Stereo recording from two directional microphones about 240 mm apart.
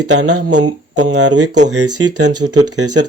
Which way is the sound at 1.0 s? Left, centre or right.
Right.